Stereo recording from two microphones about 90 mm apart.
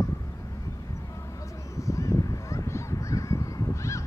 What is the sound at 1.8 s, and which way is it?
Honk, 35° left (ahead or behind).